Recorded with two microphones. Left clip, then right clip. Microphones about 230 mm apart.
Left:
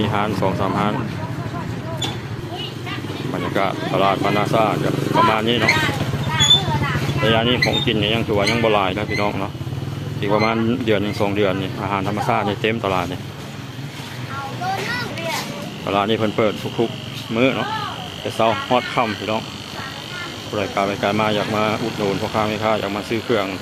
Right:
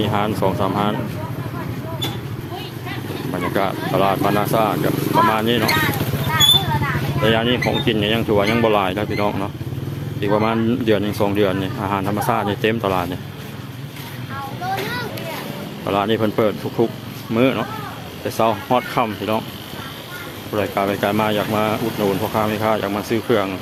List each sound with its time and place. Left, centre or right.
0.0 s speech: centre
3.3 s speech: centre
7.3 s speech: right
15.9 s speech: centre
20.6 s speech: centre